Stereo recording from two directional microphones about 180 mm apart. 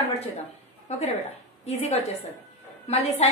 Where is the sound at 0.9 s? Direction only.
40° left (ahead or behind).